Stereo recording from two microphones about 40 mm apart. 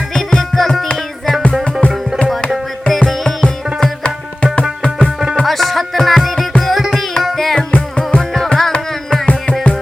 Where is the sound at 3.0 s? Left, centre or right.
Centre.